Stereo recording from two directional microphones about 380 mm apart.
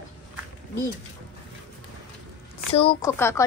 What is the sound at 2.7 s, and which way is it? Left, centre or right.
Speech, centre.